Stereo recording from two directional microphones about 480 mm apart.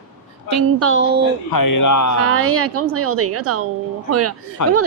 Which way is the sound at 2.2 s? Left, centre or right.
Right.